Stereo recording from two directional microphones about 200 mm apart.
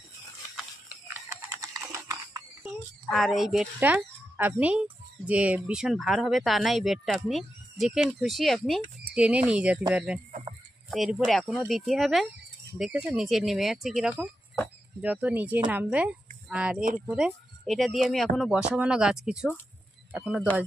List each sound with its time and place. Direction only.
0.6 s pig: 5° right (ahead or behind)
1.5 s horse: 15° right (ahead or behind)
3.1 s speech: centre (ahead or behind)